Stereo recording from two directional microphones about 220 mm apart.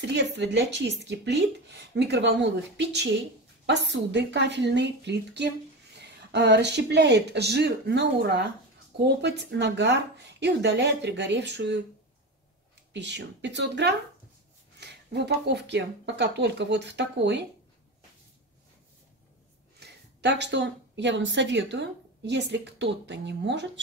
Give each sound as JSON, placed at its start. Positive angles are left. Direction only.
{"t": 0.0, "sound": "speech", "side_deg": -50}
{"t": 12.9, "sound": "speech", "side_deg": -55}
{"t": 19.8, "sound": "a woman's voice", "side_deg": -50}